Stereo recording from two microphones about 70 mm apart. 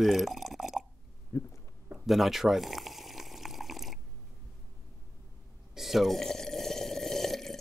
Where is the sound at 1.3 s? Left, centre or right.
Left.